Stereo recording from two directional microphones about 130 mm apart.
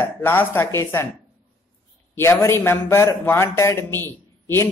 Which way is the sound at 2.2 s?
20° left (ahead or behind).